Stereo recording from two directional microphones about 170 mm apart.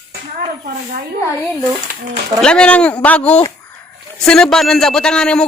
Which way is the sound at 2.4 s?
5° left (ahead or behind).